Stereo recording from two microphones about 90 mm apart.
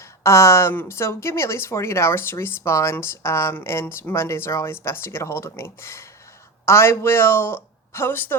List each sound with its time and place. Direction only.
0.0 s a woman's voice: 30° left (ahead or behind)